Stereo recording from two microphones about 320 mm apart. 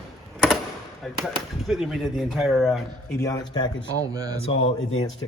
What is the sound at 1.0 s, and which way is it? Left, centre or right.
Speech, centre.